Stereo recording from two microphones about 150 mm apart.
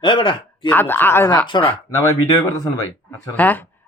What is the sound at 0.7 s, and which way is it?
Speech, 15° left (ahead or behind).